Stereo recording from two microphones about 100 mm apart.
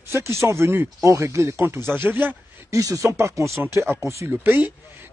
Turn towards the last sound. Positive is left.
turn(degrees=-20)  # may be behind; listen again after turning